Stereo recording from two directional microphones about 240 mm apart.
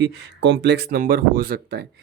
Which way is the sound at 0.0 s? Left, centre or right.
Right.